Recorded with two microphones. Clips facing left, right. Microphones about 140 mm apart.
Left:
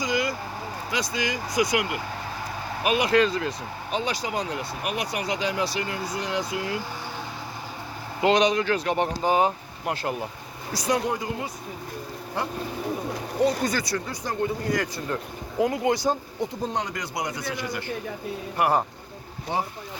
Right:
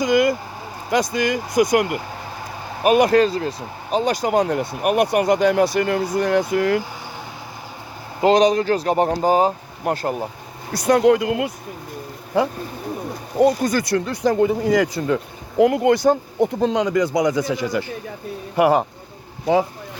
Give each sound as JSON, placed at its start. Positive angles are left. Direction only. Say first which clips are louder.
{"t": 0.0, "sound": "speech", "louder": "right 9 dB", "side_deg": -50}
{"t": 3.9, "sound": "speech", "louder": "right 10 dB", "side_deg": -45}
{"t": 8.2, "sound": "speech", "louder": "right 6 dB", "side_deg": -40}
{"t": 10.7, "sound": "speech", "louder": "right 10 dB", "side_deg": -60}
{"t": 13.4, "sound": "speech", "louder": "right 7 dB", "side_deg": -45}
{"t": 15.0, "sound": "speech", "louder": "right 9 dB", "side_deg": -90}
{"t": 15.5, "sound": "speech", "louder": "right 8 dB", "side_deg": -65}